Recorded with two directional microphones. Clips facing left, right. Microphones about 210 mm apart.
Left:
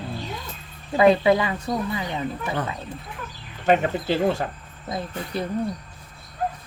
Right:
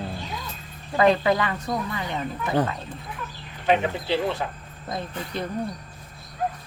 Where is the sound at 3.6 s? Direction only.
45° left (ahead or behind).